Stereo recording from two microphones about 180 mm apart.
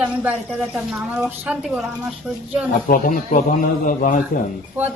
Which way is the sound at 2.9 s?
50° left (ahead or behind).